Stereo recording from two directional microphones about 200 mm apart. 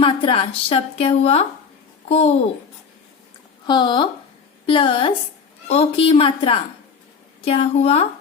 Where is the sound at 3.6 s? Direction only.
20° left (ahead or behind).